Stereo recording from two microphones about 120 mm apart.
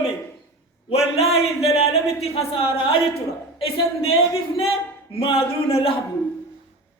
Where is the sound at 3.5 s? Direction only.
50° left (ahead or behind).